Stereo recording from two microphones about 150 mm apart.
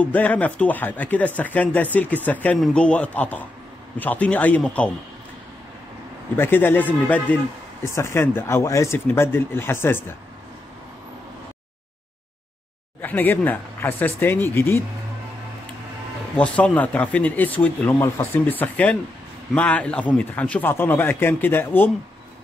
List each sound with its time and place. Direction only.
0.0 s speech: 10° left (ahead or behind)
6.3 s speech: 15° left (ahead or behind)
13.0 s speech: 10° left (ahead or behind)
16.3 s speech: 10° left (ahead or behind)